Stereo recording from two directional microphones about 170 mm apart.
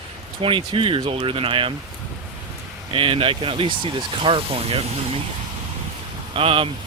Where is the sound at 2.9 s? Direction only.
30° right (ahead or behind).